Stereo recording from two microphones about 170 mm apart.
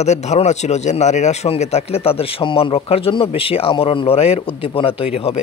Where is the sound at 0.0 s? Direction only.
40° left (ahead or behind).